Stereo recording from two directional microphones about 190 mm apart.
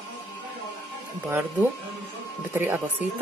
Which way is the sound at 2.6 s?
10° right (ahead or behind).